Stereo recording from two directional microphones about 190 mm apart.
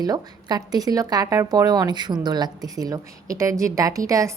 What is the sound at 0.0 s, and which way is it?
Speech, 20° right (ahead or behind).